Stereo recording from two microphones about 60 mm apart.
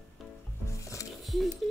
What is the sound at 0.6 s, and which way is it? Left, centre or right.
Music, left.